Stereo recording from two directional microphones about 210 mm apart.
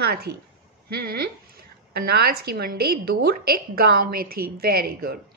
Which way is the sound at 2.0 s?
50° right (ahead or behind).